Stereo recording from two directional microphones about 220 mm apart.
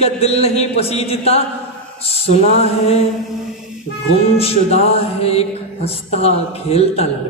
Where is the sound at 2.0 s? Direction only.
30° left (ahead or behind).